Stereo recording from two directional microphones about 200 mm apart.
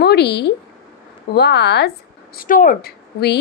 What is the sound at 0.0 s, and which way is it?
A woman's voice, 55° left (ahead or behind).